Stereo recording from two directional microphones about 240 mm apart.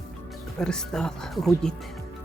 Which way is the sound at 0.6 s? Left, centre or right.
Centre.